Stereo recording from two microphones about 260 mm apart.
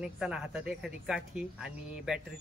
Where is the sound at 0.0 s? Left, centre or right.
Centre.